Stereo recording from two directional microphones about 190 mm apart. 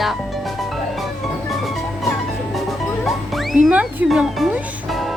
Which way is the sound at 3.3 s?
Centre (ahead or behind).